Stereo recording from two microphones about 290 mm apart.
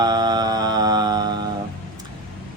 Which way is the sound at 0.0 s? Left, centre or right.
Centre.